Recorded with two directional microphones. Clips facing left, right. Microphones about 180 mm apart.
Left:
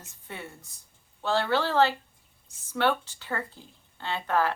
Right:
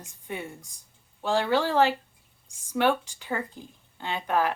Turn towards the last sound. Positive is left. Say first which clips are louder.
# right 1 dB
turn(degrees=-15)  # may be behind; listen again after turning